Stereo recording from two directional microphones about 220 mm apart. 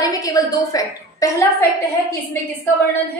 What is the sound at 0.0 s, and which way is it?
A woman's voice, 15° left (ahead or behind).